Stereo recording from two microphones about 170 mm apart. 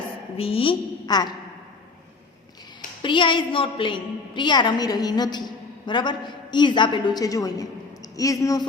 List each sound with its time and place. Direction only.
0.3 s a woman's voice: 35° left (ahead or behind)
3.0 s a woman's voice: 30° left (ahead or behind)